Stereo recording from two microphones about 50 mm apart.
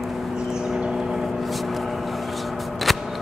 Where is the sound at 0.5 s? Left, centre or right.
Centre.